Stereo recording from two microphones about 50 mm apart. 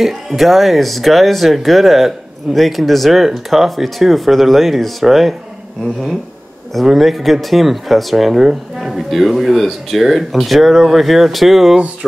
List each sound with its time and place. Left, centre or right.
0.0 s speech: centre
6.7 s speech: centre